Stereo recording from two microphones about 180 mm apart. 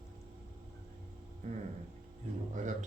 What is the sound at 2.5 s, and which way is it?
Speech, 45° right (ahead or behind).